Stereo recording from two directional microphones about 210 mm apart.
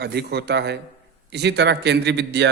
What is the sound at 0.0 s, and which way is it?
A man's voice, 50° right (ahead or behind).